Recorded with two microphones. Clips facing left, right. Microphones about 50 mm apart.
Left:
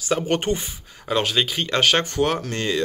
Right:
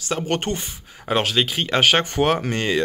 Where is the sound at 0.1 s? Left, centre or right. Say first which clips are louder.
Left 2 dB; centre.